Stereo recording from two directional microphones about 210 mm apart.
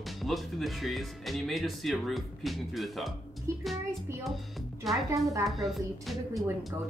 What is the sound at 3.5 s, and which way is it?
Speech, 15° right (ahead or behind).